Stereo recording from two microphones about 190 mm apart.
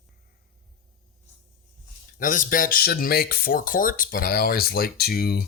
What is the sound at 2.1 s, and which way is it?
Speech, 45° left (ahead or behind).